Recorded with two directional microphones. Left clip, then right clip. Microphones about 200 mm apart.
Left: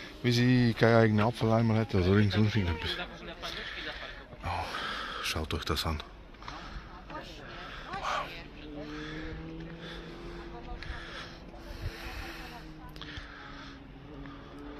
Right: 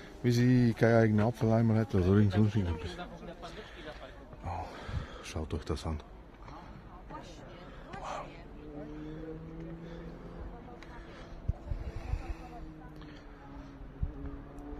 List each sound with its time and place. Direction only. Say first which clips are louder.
0.2 s speech: left 1 dB; 20° right (ahead or behind)
2.5 s a man's voice: left 5 dB; 5° right (ahead or behind)
4.5 s gasp: left 7 dB; centre (ahead or behind)
8.0 s a sound: left 7 dB; centre (ahead or behind)